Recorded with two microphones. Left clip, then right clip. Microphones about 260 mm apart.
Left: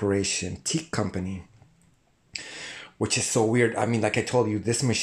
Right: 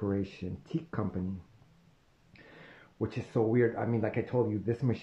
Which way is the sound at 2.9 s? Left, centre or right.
Left.